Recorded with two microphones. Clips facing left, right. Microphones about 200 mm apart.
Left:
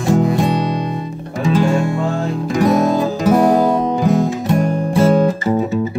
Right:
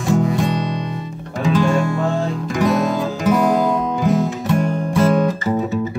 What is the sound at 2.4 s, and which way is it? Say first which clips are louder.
Music: left 5 dB; 35° left (ahead or behind).